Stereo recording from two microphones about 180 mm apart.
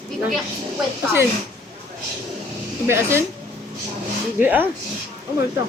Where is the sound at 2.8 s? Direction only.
15° right (ahead or behind).